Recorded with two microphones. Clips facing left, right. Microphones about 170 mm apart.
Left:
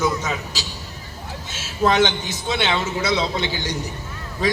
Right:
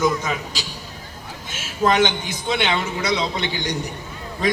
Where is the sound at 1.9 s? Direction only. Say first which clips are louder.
Even; 10° right (ahead or behind).